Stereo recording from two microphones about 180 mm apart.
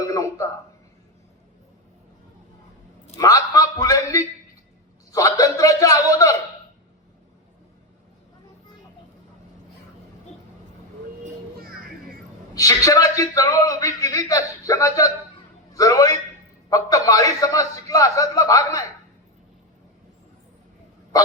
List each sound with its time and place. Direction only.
0.0 s a sound: 20° left (ahead or behind)
3.2 s a man's voice: 20° left (ahead or behind)
12.5 s a man's voice: 20° left (ahead or behind)